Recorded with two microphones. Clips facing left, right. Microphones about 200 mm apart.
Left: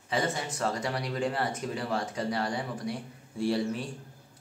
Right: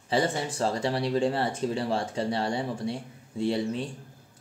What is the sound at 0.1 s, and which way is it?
Speech, 30° right (ahead or behind).